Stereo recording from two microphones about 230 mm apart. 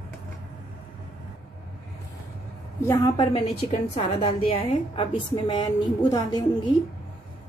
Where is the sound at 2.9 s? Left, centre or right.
Left.